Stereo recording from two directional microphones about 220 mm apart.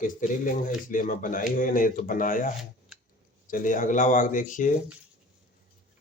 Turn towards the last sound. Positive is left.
turn(degrees=35)  # may be behind; listen again after turning